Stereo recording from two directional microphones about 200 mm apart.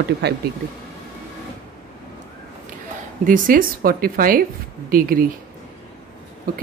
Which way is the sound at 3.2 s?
40° right (ahead or behind).